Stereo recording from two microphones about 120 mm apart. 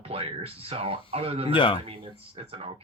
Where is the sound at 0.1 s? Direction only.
55° right (ahead or behind).